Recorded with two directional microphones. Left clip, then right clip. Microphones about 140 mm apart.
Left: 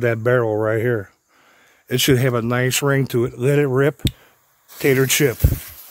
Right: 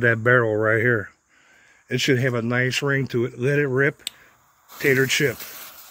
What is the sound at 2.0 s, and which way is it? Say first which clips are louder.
Speech: left 3 dB; 45° left (ahead or behind).